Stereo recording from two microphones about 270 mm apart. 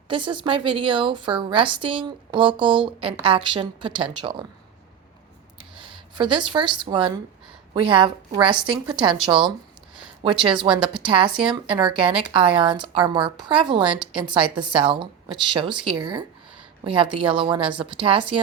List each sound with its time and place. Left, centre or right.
0.1 s a woman's voice: centre
5.7 s a woman's voice: centre
8.5 s a woman's voice: centre
9.2 s a woman's voice: centre
10.8 s a woman's voice: centre
11.1 s a woman's voice: centre